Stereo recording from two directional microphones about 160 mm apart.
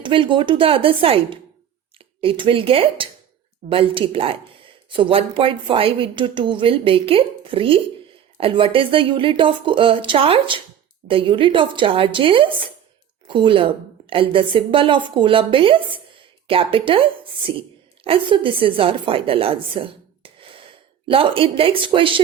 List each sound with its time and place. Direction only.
0.0 s a woman's voice: 30° right (ahead or behind)